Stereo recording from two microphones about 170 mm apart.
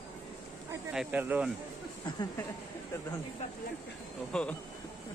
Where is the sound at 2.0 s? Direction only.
25° left (ahead or behind).